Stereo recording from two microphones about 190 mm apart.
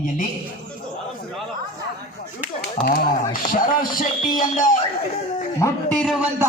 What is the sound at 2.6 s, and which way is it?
Speech, 55° left (ahead or behind).